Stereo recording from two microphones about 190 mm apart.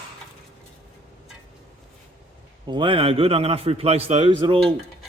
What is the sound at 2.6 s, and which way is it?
A man's voice, 25° right (ahead or behind).